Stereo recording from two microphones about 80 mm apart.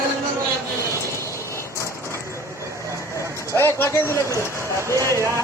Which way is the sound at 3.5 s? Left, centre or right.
Left.